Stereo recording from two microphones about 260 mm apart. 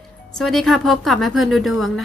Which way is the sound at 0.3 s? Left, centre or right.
Centre.